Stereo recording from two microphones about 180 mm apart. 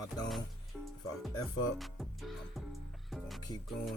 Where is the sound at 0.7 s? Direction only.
Centre (ahead or behind).